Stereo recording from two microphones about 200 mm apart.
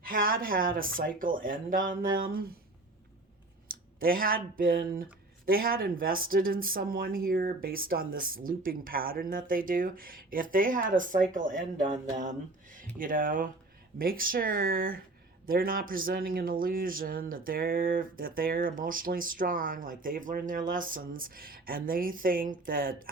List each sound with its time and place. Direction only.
0.0 s speech: 45° right (ahead or behind)
3.7 s speech: 45° right (ahead or behind)
11.8 s a sound: 40° right (ahead or behind)
13.0 s speech: 45° right (ahead or behind)